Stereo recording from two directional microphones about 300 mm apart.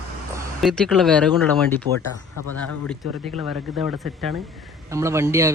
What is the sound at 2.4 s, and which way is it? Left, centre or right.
Speech, left.